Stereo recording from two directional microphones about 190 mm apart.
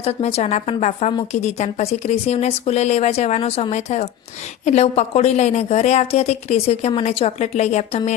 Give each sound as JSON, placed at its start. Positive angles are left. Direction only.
{"t": 0.0, "sound": "speech", "side_deg": 30}